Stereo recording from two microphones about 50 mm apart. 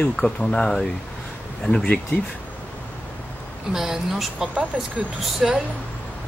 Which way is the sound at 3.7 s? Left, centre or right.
Centre.